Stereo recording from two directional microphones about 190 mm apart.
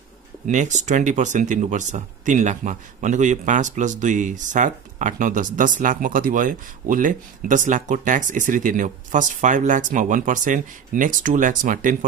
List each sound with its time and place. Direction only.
0.5 s speech: 40° right (ahead or behind)